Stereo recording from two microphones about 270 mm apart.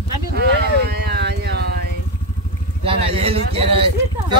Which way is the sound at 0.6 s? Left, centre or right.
Right.